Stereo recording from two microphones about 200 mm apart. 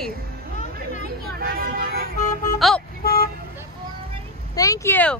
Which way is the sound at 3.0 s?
45° left (ahead or behind).